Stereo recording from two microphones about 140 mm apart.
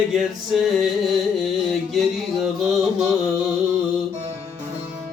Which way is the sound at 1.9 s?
5° right (ahead or behind).